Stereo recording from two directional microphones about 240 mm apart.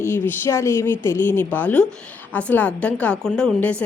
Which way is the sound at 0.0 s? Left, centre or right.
Centre.